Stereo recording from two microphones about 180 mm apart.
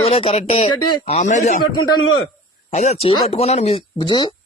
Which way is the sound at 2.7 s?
40° left (ahead or behind).